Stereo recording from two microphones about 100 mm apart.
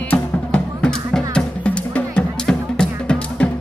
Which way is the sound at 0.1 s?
10° left (ahead or behind).